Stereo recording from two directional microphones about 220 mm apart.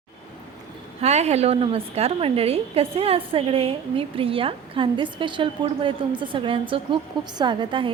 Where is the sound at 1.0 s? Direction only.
30° right (ahead or behind).